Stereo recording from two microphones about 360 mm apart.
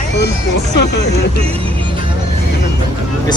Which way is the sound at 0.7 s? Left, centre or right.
Left.